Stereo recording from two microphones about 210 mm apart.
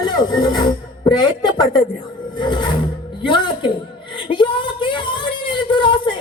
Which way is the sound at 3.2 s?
20° left (ahead or behind).